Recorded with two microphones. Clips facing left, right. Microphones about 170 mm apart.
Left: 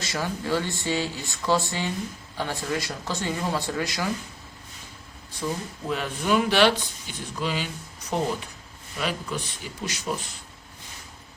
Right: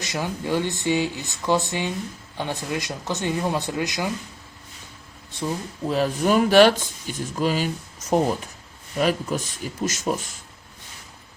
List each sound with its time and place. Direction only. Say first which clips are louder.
0.0 s speech: right 2 dB; 20° right (ahead or behind)
5.9 s speech: right 4 dB; 40° right (ahead or behind)